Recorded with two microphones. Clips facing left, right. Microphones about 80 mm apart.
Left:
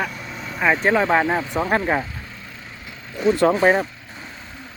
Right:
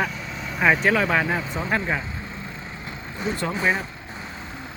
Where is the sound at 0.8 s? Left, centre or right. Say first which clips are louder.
Left 3 dB; left.